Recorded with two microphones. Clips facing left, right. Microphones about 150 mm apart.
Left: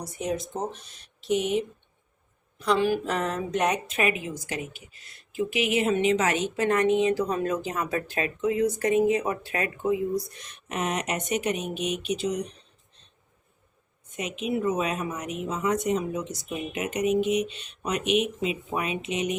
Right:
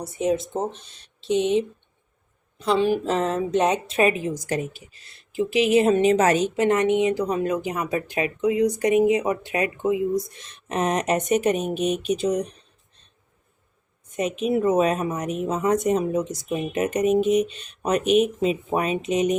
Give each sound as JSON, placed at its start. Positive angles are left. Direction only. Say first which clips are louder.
{"t": 0.0, "sound": "a woman's voice", "louder": "right 7 dB", "side_deg": -25}
{"t": 6.6, "sound": "speech", "louder": "even", "side_deg": -20}
{"t": 10.8, "sound": "speech", "louder": "right 6 dB", "side_deg": -40}
{"t": 14.2, "sound": "speech", "louder": "right 6 dB", "side_deg": -45}